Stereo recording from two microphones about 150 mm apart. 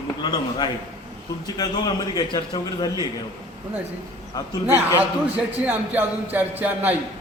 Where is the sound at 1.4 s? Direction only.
25° left (ahead or behind).